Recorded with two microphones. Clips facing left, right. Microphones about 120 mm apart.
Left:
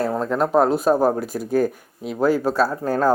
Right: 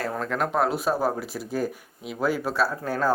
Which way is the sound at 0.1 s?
35° left (ahead or behind).